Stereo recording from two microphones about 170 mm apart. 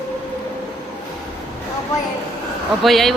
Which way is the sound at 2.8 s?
Centre (ahead or behind).